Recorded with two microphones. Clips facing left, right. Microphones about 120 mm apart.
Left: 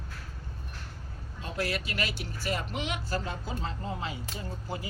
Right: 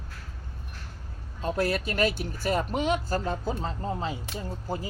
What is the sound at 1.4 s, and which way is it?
Speech, 45° right (ahead or behind).